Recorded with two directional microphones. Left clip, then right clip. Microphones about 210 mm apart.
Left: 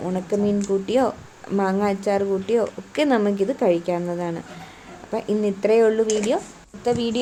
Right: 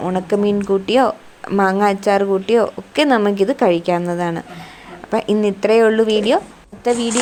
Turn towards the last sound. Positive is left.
turn(degrees=-20)  # may be behind; listen again after turning